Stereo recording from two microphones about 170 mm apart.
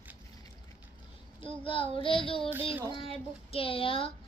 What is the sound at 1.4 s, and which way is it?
Speech, 30° left (ahead or behind).